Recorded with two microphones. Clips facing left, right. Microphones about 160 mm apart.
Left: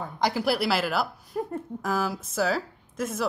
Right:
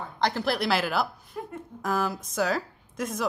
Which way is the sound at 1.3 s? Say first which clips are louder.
Left 6 dB; 45° left (ahead or behind).